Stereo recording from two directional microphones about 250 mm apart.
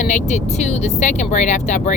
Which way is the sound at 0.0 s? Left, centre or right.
Left.